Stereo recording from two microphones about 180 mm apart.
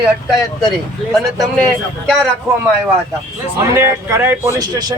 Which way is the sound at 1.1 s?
Centre (ahead or behind).